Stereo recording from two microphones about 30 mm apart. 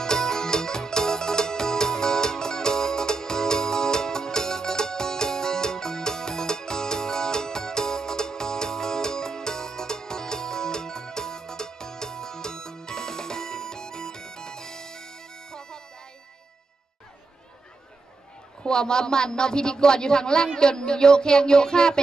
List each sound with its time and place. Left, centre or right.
0.0 s music: left
18.6 s speech: left